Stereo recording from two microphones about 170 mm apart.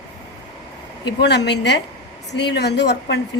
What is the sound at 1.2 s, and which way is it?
A woman's voice, 90° left.